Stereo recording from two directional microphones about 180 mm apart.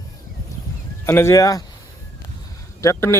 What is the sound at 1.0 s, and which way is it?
Speech, 15° left (ahead or behind).